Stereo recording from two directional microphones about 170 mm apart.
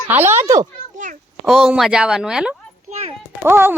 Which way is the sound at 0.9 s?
50° right (ahead or behind).